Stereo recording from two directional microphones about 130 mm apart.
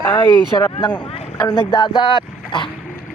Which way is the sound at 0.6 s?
35° left (ahead or behind).